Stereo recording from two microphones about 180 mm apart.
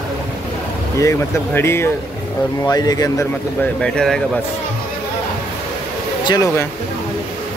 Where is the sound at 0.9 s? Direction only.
15° left (ahead or behind).